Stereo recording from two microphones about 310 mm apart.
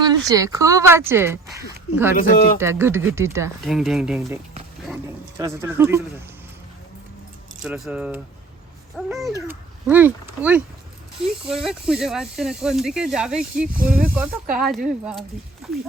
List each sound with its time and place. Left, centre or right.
0.0 s speech: centre
5.4 s speech: centre
7.6 s speech: centre
13.7 s speech: right
14.5 s speech: centre